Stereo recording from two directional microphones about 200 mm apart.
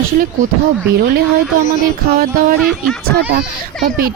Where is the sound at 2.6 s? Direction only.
Centre (ahead or behind).